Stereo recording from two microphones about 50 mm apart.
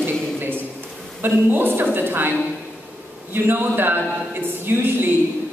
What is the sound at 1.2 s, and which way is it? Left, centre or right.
A woman's voice, right.